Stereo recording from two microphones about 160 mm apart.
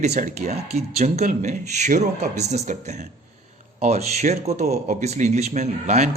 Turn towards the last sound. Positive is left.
turn(degrees=-45)  # may be behind; listen again after turning